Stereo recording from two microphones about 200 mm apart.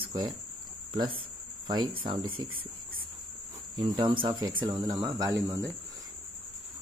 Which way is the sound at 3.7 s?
25° right (ahead or behind).